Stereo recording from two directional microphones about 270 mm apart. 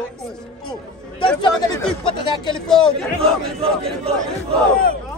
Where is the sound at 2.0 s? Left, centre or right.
Centre.